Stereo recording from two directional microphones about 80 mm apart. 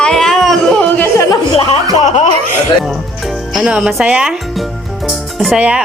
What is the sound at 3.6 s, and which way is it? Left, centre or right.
Speech, centre.